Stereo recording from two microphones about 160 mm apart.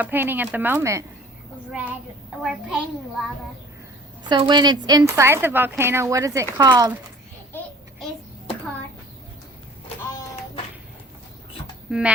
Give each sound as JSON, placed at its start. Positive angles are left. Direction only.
{"t": 0.0, "sound": "speech", "side_deg": -10}
{"t": 2.4, "sound": "a child's voice", "side_deg": -5}
{"t": 4.2, "sound": "speech", "side_deg": -30}
{"t": 7.5, "sound": "a sound", "side_deg": 5}
{"t": 11.9, "sound": "speech", "side_deg": -5}